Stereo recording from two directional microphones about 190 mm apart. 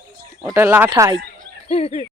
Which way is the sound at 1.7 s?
30° left (ahead or behind).